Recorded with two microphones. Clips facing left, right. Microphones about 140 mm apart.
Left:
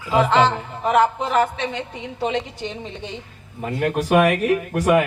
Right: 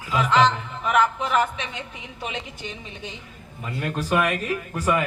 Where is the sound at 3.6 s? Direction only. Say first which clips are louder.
Left 7 dB; 65° left (ahead or behind).